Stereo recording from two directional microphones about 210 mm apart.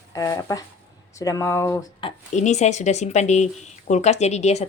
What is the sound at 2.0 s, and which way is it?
Speech, 35° left (ahead or behind).